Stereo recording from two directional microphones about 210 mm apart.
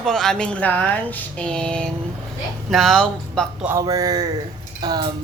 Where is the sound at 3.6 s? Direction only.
15° right (ahead or behind).